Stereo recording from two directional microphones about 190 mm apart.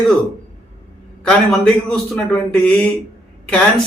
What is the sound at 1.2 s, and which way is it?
A man's voice, 5° left (ahead or behind).